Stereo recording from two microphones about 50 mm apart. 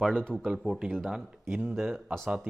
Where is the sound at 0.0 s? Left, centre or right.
Centre.